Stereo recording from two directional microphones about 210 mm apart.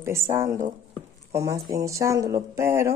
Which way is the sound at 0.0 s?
10° right (ahead or behind).